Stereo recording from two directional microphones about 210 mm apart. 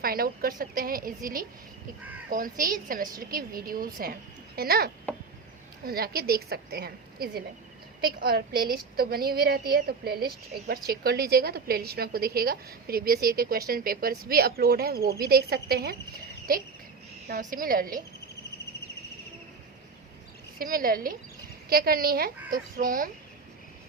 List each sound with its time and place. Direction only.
0.0 s a woman's voice: 45° right (ahead or behind)
17.5 s a woman's voice: 40° right (ahead or behind)
20.6 s a woman's voice: 40° right (ahead or behind)